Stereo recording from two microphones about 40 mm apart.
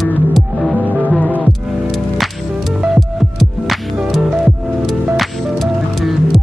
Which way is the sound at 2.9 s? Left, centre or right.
Centre.